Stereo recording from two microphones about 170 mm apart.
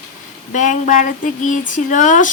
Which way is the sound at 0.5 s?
45° left (ahead or behind).